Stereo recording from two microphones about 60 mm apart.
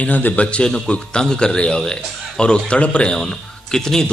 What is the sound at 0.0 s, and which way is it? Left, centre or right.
A man's voice, left.